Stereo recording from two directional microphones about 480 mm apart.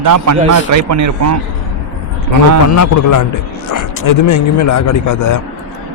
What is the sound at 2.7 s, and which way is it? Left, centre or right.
A man's voice, left.